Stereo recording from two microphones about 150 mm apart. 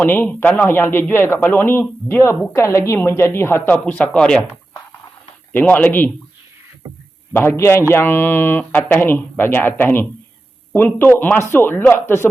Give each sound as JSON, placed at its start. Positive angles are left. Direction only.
{"t": 0.0, "sound": "speech", "side_deg": 10}
{"t": 5.5, "sound": "speech", "side_deg": 10}
{"t": 7.3, "sound": "speech", "side_deg": 15}